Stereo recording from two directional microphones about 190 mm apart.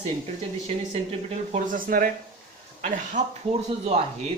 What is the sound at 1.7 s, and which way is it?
Speech, 45° right (ahead or behind).